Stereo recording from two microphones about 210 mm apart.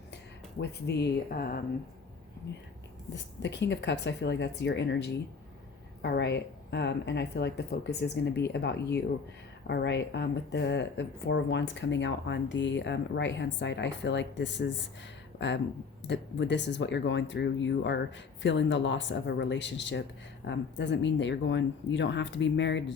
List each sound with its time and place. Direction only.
0.6 s speech: 50° left (ahead or behind)
3.2 s speech: 55° left (ahead or behind)